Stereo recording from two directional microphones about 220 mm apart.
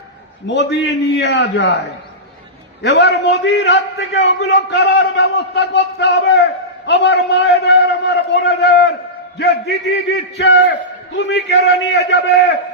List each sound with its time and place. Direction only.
0.4 s a man's voice: 50° left (ahead or behind)
2.8 s a man's voice: 50° left (ahead or behind)